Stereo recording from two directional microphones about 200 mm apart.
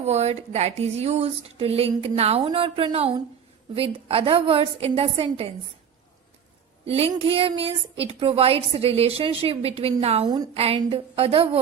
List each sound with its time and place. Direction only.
0.0 s a woman's voice: 35° right (ahead or behind)
6.8 s a woman's voice: 30° right (ahead or behind)
10.2 s a woman's voice: 20° right (ahead or behind)